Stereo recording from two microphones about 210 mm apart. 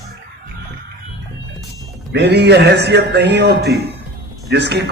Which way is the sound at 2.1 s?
55° right (ahead or behind).